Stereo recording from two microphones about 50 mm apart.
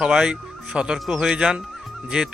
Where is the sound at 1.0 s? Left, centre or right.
Centre.